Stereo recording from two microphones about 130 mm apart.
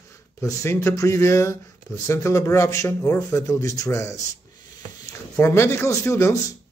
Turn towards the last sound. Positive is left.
turn(degrees=20)  # may be behind; listen again after turning